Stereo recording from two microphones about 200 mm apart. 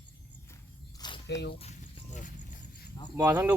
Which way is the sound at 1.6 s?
35° left (ahead or behind).